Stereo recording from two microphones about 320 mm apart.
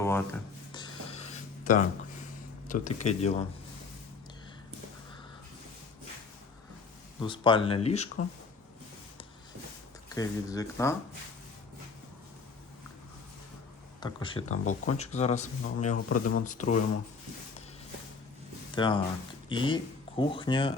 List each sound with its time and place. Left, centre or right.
0.0 s writing: centre; by 1.9 s left
2.8 s speech: left
7.2 s speech: centre
10.2 s speech: centre
14.0 s speech: centre
16.0 s speech: left
16.4 s speech: left
18.7 s speech: centre